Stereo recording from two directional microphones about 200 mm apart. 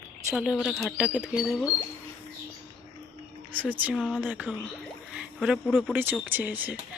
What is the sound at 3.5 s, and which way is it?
Speech, 10° right (ahead or behind).